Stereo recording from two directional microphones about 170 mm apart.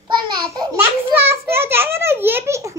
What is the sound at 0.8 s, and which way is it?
A child's voice, 15° right (ahead or behind).